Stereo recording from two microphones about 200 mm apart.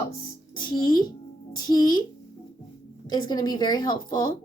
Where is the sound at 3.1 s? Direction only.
20° left (ahead or behind).